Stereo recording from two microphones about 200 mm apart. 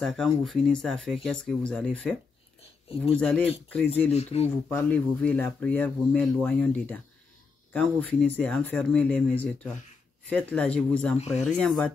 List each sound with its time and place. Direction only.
0.0 s speech: centre (ahead or behind)
3.2 s speech: 5° left (ahead or behind)
4.1 s speech: 30° left (ahead or behind)
4.6 s speech: 5° left (ahead or behind)